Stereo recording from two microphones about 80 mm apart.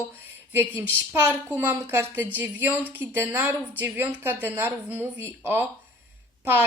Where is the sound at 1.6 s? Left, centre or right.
Right.